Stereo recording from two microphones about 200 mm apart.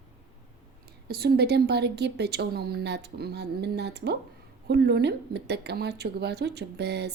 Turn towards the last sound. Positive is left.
turn(degrees=-55)  # may be behind; listen again after turning